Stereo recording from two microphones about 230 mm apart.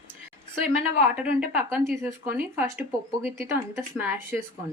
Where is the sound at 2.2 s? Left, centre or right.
Right.